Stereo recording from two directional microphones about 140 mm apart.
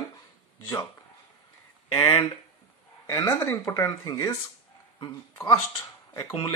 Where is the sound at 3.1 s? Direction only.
25° left (ahead or behind).